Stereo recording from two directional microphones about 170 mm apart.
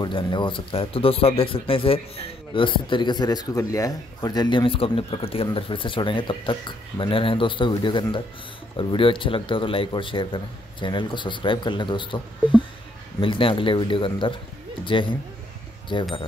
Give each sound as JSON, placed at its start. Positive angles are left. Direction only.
{"t": 0.0, "sound": "speech", "side_deg": 25}